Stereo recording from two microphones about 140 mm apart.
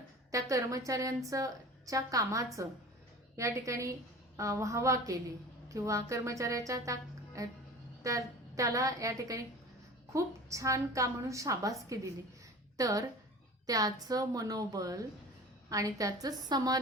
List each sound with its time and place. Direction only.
0.3 s a woman's voice: 25° right (ahead or behind)